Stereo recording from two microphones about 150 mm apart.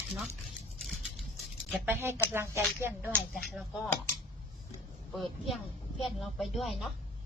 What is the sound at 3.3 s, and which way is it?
Speech, centre (ahead or behind).